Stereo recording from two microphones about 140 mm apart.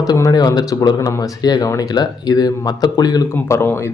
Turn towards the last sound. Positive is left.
turn(degrees=15)  # may be behind; listen again after turning